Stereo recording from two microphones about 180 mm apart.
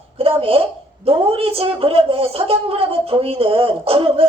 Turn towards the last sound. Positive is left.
turn(degrees=-30)  # may be behind; listen again after turning